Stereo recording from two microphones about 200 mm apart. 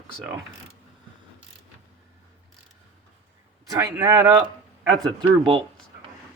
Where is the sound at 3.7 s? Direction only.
15° right (ahead or behind).